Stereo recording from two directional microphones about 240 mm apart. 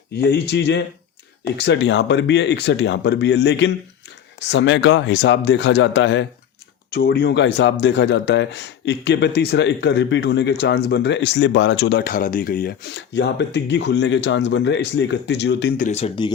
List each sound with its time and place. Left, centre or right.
0.2 s a man's voice: left
15.8 s speech: left